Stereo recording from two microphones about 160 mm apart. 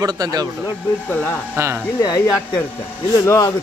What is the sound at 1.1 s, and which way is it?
Speech, 10° left (ahead or behind).